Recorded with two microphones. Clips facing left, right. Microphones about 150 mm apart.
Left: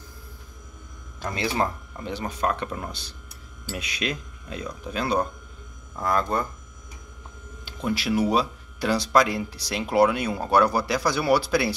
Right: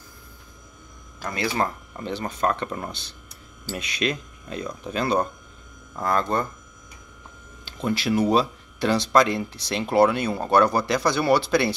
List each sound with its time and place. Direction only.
1.2 s speech: 25° left (ahead or behind)
2.0 s speech: 10° left (ahead or behind)
7.6 s speech: 5° left (ahead or behind)